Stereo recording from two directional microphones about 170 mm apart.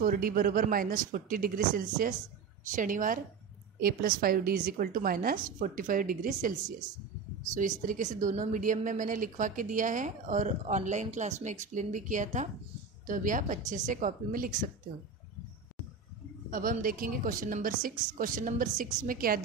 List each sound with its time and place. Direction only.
0.0 s a woman's voice: 55° right (ahead or behind)
7.5 s a woman's voice: 50° right (ahead or behind)
16.4 s a woman's voice: 55° right (ahead or behind)